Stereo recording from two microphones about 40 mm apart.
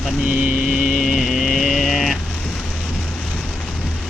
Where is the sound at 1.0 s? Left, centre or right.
Centre.